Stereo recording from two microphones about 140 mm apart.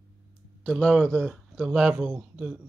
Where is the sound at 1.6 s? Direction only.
5° right (ahead or behind).